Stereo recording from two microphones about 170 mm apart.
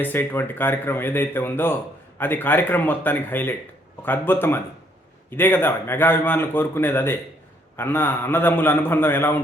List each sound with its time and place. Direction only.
0.0 s a man's voice: 10° left (ahead or behind)